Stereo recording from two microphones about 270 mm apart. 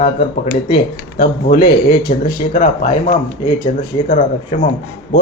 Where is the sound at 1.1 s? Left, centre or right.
Left.